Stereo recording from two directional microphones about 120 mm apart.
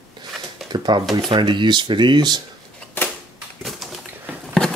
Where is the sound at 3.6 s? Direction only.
Centre (ahead or behind).